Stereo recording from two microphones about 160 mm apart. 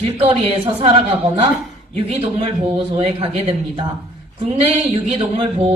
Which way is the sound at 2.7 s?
40° right (ahead or behind).